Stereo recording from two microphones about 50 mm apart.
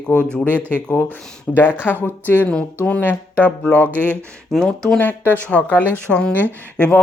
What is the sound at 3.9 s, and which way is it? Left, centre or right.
Speech, right.